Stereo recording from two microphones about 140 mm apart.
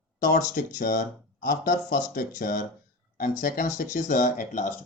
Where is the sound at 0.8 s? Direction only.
75° left (ahead or behind).